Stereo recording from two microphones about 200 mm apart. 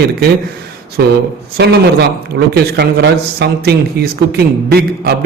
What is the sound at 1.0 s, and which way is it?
A man's voice, 55° right (ahead or behind).